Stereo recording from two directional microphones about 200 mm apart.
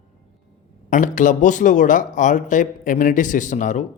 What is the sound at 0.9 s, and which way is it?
A man's voice, 40° left (ahead or behind).